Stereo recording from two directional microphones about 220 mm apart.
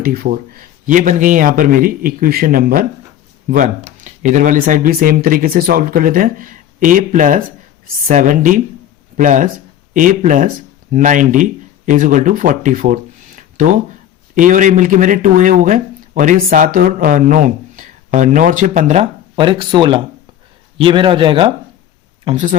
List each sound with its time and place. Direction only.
0.0 s speech: 45° right (ahead or behind)
4.0 s speech: 35° right (ahead or behind)
19.4 s speech: 20° right (ahead or behind)